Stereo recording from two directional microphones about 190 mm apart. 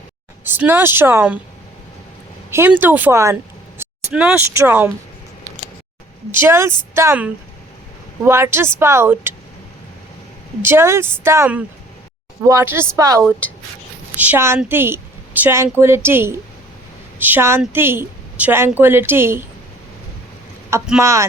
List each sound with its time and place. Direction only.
0.4 s a woman's voice: 10° right (ahead or behind)
2.5 s a woman's voice: 10° right (ahead or behind)
6.3 s a woman's voice: 15° right (ahead or behind)
10.6 s a woman's voice: 10° right (ahead or behind)
21.0 s a woman's voice: 15° right (ahead or behind)